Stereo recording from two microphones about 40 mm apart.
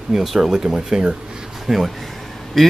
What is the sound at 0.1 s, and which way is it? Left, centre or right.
Speech, centre.